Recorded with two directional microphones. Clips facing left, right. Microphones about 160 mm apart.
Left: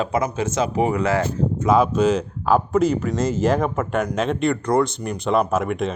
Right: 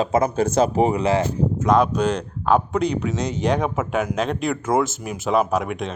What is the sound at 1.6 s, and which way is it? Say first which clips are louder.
Speech: left 2 dB; 5° left (ahead or behind).